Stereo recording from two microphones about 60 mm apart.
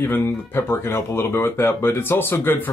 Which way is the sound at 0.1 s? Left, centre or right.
Left.